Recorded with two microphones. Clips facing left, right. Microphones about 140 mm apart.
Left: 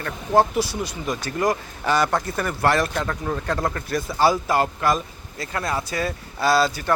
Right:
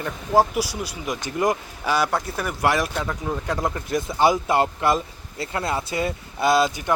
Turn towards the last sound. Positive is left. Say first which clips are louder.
# even
turn(degrees=-15)  # may be behind; listen again after turning